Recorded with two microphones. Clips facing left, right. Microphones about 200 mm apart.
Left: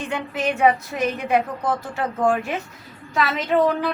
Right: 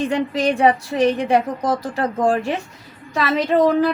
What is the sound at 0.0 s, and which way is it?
A woman's voice, 35° right (ahead or behind).